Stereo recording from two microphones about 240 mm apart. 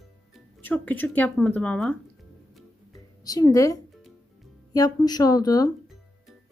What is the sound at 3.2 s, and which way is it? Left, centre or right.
A woman's voice, centre.